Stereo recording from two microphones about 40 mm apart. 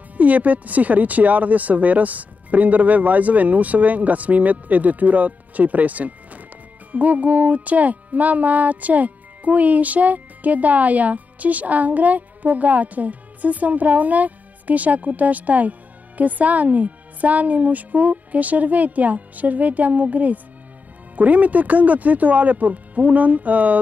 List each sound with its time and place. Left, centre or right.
0.2 s music: right